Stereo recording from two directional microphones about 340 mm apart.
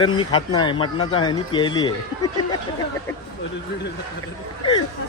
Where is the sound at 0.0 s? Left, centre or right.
Centre.